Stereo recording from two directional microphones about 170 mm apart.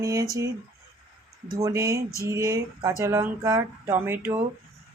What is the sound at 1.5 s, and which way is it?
Speech, 20° right (ahead or behind).